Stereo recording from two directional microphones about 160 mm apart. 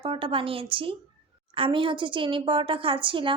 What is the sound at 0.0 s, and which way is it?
A woman's voice, 35° right (ahead or behind).